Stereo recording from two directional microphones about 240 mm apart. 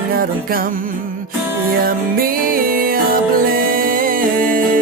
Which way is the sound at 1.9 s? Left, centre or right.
Right.